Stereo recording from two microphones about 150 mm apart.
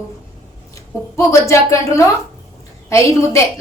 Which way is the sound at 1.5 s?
20° left (ahead or behind).